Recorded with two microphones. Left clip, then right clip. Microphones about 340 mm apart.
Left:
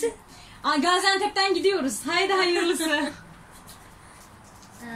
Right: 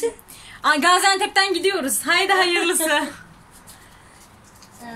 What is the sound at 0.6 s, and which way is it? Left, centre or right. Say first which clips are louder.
A woman's voice: right 6 dB; right.